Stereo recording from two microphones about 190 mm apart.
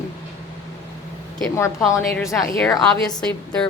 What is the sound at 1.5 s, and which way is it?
Speech, 15° left (ahead or behind).